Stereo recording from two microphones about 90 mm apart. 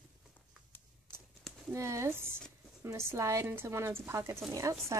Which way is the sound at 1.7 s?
30° right (ahead or behind).